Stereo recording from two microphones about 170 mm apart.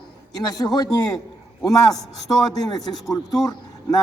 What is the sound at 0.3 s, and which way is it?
Speech, 25° left (ahead or behind).